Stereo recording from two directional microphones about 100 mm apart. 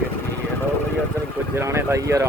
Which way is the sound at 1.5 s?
30° right (ahead or behind).